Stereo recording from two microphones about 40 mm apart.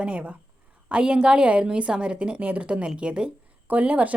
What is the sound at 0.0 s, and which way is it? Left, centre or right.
A woman's voice, right.